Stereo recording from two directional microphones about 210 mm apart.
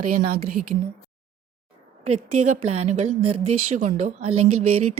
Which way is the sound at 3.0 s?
90° right.